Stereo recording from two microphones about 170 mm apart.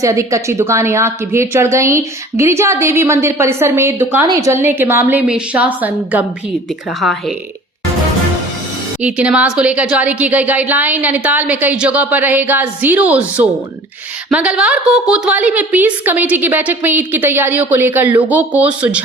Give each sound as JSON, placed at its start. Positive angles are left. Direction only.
{"t": 0.0, "sound": "a woman's voice", "side_deg": -20}
{"t": 9.0, "sound": "a woman's voice", "side_deg": -5}